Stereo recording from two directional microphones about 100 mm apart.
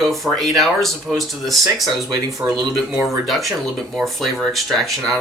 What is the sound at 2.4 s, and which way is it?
Speech, 15° right (ahead or behind).